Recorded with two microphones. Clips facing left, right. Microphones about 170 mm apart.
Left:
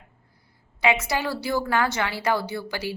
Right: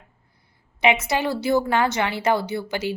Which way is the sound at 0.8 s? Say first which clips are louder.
Right 3 dB; 20° right (ahead or behind).